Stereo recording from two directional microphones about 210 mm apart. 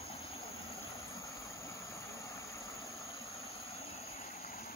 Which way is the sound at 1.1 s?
15° left (ahead or behind).